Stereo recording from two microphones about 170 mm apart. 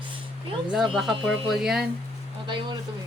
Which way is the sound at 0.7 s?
Centre (ahead or behind).